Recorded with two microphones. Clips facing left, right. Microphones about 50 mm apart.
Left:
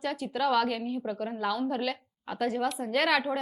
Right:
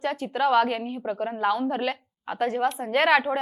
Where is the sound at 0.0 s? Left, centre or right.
Right.